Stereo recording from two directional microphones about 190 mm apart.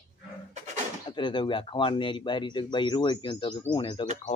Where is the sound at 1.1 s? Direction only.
25° left (ahead or behind).